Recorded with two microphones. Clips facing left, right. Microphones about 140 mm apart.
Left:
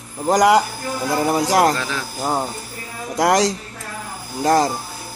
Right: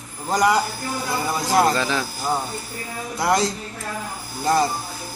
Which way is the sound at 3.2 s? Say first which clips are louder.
Left 4 dB; 90° left.